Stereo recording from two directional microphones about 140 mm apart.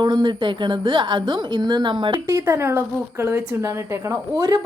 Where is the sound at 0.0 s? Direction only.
30° right (ahead or behind).